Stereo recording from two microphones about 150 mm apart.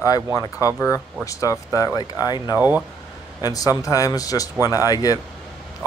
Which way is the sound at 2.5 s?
10° right (ahead or behind).